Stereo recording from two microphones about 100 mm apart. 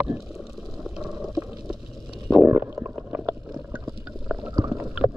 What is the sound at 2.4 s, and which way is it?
Stomach rumble, 25° right (ahead or behind).